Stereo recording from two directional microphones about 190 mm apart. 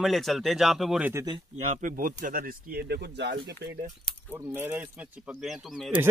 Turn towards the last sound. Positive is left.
turn(degrees=0)  # may be behind; listen again after turning